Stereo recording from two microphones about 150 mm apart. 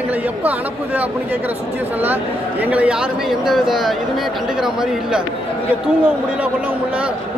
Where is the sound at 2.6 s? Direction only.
10° right (ahead or behind).